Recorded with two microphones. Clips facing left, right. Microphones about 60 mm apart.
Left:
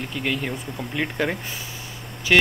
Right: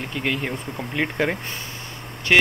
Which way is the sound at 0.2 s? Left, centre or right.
Centre.